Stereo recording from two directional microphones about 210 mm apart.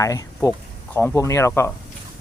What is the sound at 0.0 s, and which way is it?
Speech, 15° left (ahead or behind).